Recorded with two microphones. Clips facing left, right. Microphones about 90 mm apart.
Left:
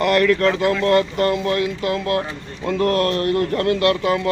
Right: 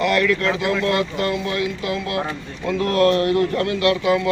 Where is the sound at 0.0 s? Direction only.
45° left (ahead or behind).